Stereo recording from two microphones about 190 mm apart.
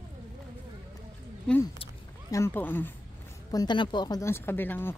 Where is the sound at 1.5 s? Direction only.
5° left (ahead or behind).